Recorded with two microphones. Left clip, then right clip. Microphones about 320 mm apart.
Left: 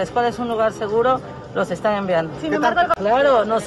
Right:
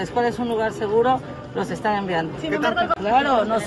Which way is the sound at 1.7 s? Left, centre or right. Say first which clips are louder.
Left 2 dB; centre.